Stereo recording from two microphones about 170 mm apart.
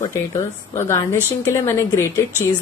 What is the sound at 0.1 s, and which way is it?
Speech, 15° left (ahead or behind).